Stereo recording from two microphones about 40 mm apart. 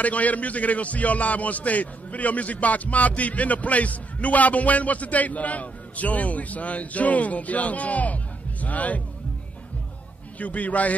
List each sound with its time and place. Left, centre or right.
0.0 s a man's voice: left
10.4 s a man's voice: left